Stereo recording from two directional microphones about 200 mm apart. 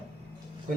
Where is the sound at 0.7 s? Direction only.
40° right (ahead or behind).